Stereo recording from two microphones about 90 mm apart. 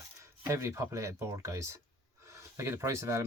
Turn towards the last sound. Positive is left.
turn(degrees=-35)  # may be behind; listen again after turning